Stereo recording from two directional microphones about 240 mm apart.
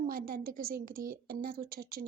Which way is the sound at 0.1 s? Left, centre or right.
Right.